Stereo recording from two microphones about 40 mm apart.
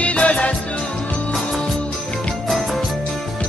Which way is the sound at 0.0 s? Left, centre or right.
Left.